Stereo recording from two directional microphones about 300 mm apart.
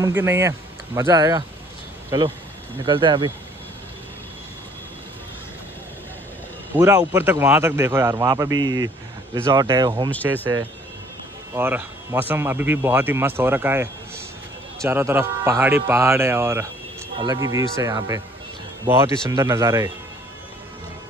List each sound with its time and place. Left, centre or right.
0.0 s speech: centre
6.8 s speech: centre
19.3 s speech: centre